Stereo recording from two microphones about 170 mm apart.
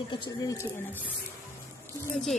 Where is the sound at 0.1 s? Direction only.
25° left (ahead or behind).